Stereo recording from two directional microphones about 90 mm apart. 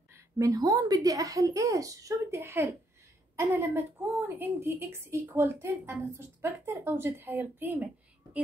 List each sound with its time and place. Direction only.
0.4 s a woman's voice: 40° right (ahead or behind); by 8.4 s 20° right (ahead or behind)